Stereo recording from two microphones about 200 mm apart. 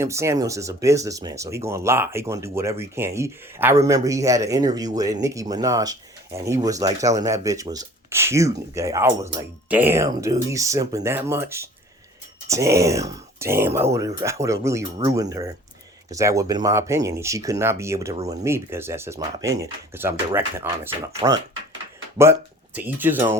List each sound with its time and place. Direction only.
0.0 s speech: 15° right (ahead or behind)
21.2 s speech: 25° right (ahead or behind)
22.2 s speech: 10° right (ahead or behind)